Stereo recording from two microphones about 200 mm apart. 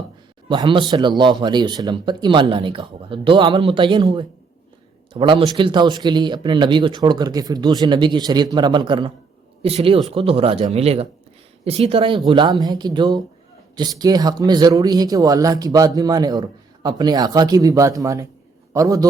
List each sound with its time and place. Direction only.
0.4 s a man's voice: 25° right (ahead or behind)